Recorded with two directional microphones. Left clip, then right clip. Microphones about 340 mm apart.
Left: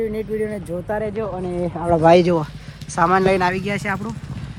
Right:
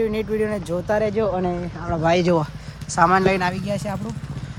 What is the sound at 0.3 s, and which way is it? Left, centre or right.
Speech, centre.